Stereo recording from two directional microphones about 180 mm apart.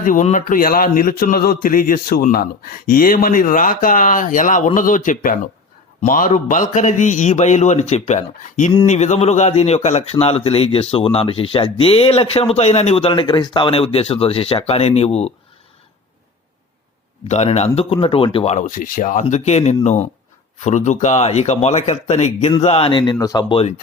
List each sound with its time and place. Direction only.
0.0 s a man's voice: 45° left (ahead or behind)
17.2 s a man's voice: 40° left (ahead or behind)